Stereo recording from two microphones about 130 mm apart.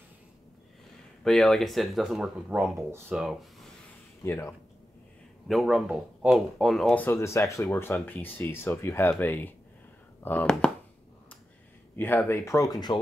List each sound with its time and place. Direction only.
1.2 s speech: 5° left (ahead or behind)
4.2 s speech: 20° left (ahead or behind)
5.5 s speech: centre (ahead or behind); by 10.5 s 15° left (ahead or behind)
12.0 s speech: 15° left (ahead or behind); by 13.0 s 30° left (ahead or behind)